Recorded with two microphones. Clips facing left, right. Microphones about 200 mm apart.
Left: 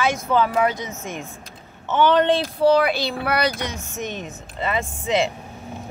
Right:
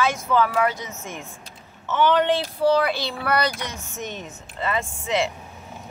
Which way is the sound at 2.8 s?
15° left (ahead or behind).